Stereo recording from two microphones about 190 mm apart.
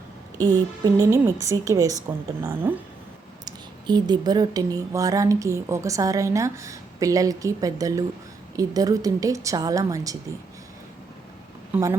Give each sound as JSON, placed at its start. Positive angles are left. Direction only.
{"t": 0.4, "sound": "speech", "side_deg": -15}
{"t": 3.4, "sound": "speech", "side_deg": -20}
{"t": 11.7, "sound": "speech", "side_deg": -15}